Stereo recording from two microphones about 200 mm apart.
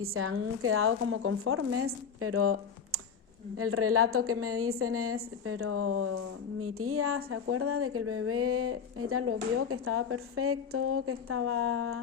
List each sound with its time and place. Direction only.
0.0 s a woman's voice: 90° right